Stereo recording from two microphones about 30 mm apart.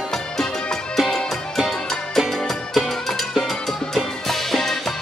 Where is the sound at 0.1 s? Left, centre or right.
Centre.